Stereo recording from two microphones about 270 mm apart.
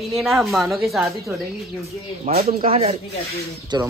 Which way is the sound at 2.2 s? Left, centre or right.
Right.